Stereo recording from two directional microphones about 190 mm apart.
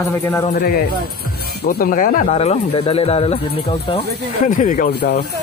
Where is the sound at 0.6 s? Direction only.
50° left (ahead or behind).